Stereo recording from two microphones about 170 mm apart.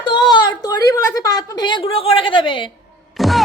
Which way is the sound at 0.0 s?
25° left (ahead or behind).